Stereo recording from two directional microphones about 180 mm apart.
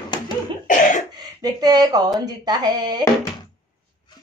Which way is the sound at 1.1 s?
20° right (ahead or behind).